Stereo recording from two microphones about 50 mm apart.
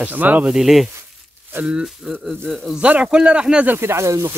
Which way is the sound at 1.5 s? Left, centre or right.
Right.